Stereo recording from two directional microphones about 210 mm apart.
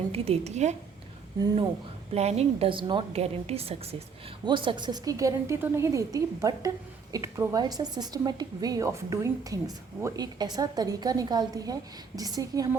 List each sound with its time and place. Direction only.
0.1 s a woman's voice: 30° right (ahead or behind)
2.1 s a woman's voice: 30° right (ahead or behind)